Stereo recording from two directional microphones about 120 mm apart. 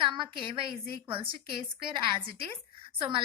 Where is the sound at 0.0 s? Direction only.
45° right (ahead or behind).